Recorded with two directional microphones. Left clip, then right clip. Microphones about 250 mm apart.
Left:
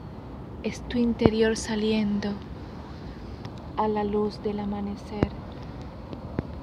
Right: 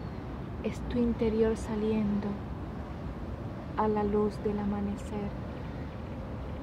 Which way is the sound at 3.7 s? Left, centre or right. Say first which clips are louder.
Left 3 dB; centre.